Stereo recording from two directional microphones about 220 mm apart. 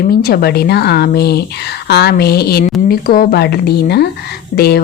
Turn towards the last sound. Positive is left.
turn(degrees=45)  # may be behind; listen again after turning